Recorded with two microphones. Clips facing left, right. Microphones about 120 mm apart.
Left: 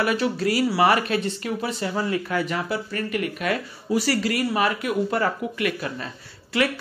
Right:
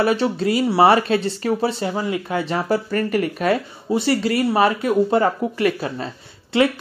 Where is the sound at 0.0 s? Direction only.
30° right (ahead or behind).